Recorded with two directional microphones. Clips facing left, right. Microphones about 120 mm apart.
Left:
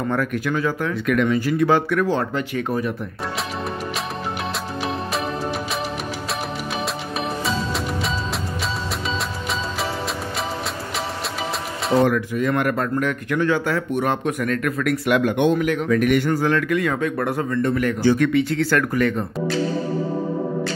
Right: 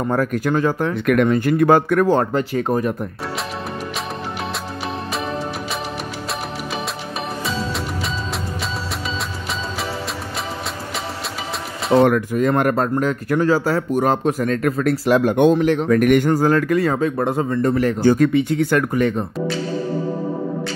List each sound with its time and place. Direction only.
0.1 s speech: 40° right (ahead or behind)
1.0 s speech: 50° right (ahead or behind)
12.0 s speech: 45° right (ahead or behind)
16.0 s speech: 45° right (ahead or behind)
18.3 s speech: 20° right (ahead or behind)